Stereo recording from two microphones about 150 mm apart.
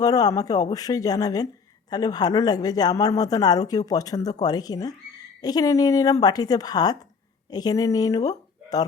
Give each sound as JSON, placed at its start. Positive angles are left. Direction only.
{"t": 0.0, "sound": "speech", "side_deg": 25}